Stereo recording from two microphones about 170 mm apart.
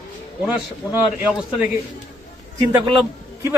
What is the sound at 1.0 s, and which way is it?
Speech, centre (ahead or behind).